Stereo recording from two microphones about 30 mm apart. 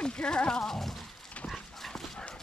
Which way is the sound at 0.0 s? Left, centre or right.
Left.